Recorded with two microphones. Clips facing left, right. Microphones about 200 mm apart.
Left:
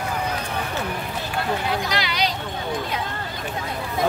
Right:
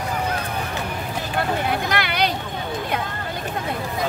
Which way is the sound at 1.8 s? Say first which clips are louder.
Right 2 dB; 55° right (ahead or behind).